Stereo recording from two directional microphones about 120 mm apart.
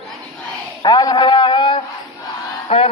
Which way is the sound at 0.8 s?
35° left (ahead or behind).